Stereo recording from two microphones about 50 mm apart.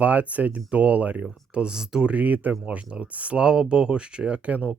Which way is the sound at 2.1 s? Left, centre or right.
Right.